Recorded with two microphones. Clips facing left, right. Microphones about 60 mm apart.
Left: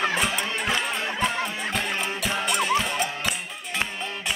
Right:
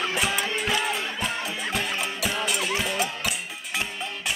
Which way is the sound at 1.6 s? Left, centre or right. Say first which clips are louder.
Left 1 dB; centre.